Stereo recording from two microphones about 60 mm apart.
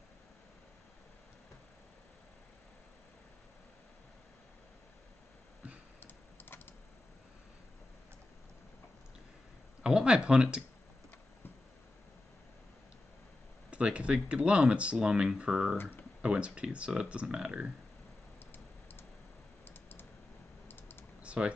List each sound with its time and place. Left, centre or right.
5.9 s typing: left
9.8 s speech: centre
13.7 s speech: centre
15.8 s speech: left
16.2 s speech: centre
19.7 s typing: left
21.2 s typing: centre